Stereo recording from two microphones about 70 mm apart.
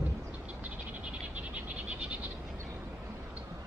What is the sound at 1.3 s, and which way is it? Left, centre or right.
Frog, centre.